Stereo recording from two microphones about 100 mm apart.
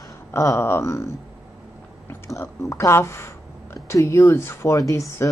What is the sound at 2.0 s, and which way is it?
A woman's voice, 25° left (ahead or behind).